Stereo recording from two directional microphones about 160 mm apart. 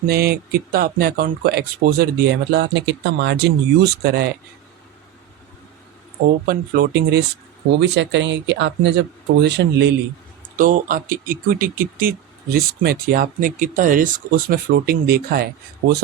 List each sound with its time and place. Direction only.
0.1 s speech: 70° right (ahead or behind); by 4.3 s 90° right
6.4 s speech: 85° right
10.6 s speech: 60° right (ahead or behind); by 15.4 s 75° right (ahead or behind)